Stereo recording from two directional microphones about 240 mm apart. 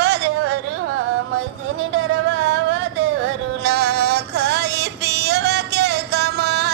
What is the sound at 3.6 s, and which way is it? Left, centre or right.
Music, right.